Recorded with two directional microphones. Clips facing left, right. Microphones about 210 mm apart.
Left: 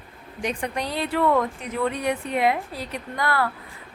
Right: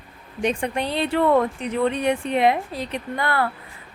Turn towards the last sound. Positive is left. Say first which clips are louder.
# right 1 dB
turn(degrees=-25)  # may be behind; listen again after turning